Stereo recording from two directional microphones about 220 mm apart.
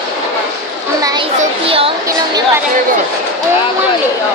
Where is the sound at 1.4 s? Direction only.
25° right (ahead or behind).